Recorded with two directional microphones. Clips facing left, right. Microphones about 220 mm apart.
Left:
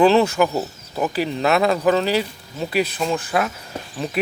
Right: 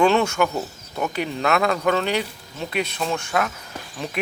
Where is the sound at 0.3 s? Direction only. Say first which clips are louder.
Left 3 dB; 5° left (ahead or behind).